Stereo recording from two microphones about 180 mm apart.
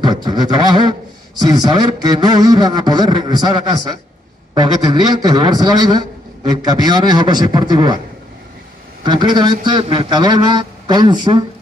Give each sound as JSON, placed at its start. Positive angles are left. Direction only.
{"t": 0.0, "sound": "a sound", "side_deg": -25}
{"t": 1.4, "sound": "a man's voice", "side_deg": -20}
{"t": 9.0, "sound": "a man's voice", "side_deg": -25}